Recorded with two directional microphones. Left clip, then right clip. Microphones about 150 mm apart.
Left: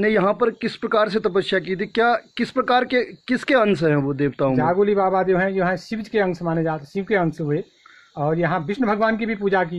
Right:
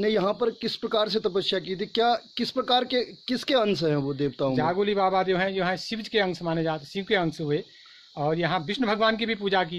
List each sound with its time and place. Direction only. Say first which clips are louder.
0.0 s a man's voice: left 6 dB; 15° right (ahead or behind)
4.6 s a man's voice: left 6 dB; 55° right (ahead or behind); by 9.7 s 70° right (ahead or behind)